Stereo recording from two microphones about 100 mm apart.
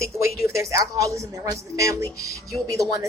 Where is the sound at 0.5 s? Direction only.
30° right (ahead or behind).